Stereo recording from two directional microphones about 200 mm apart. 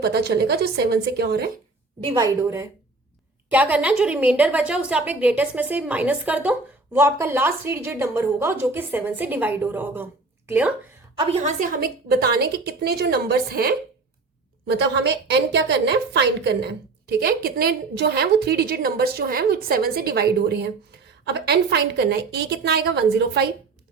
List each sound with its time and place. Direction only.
0.0 s a woman's voice: 55° right (ahead or behind)
2.0 s a woman's voice: 20° right (ahead or behind)
11.2 s a woman's voice: 30° right (ahead or behind); by 23.5 s 55° right (ahead or behind)